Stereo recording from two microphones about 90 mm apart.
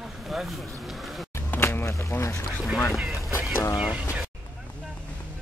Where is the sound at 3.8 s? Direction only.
10° right (ahead or behind).